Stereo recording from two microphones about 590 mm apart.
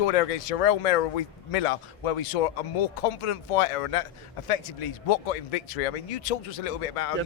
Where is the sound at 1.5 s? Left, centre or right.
Left.